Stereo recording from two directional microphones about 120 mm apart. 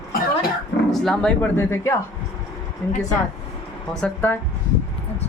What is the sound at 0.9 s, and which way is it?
Speech, 5° left (ahead or behind).